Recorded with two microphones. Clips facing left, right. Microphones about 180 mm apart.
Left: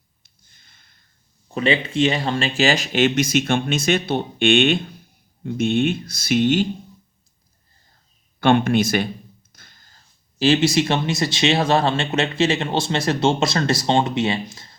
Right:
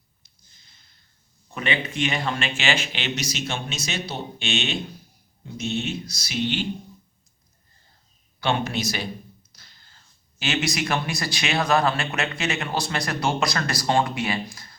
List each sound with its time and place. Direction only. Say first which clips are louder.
0.2 s a sound: left 2 dB; 55° left (ahead or behind)
1.5 s speech: left 7 dB; 30° left (ahead or behind); by 6.7 s 45° left (ahead or behind)
8.4 s speech: left 9 dB; 55° left (ahead or behind); by 14.8 s 25° left (ahead or behind)